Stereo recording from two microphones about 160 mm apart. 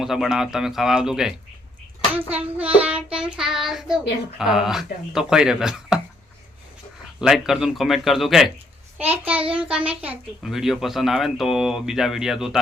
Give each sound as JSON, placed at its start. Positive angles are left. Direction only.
{"t": 0.0, "sound": "speech", "side_deg": -5}
{"t": 2.1, "sound": "child singing", "side_deg": -10}
{"t": 4.4, "sound": "speech", "side_deg": -5}
{"t": 7.2, "sound": "speech", "side_deg": 0}
{"t": 9.0, "sound": "child singing", "side_deg": -10}
{"t": 9.5, "sound": "speech", "side_deg": -5}